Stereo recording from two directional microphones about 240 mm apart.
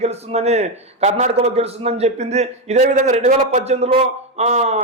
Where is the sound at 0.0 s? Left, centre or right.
Right.